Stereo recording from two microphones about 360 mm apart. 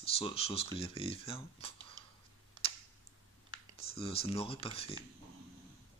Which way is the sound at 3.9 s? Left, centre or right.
Centre.